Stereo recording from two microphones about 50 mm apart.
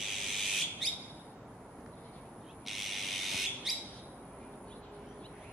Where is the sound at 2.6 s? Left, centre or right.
Centre.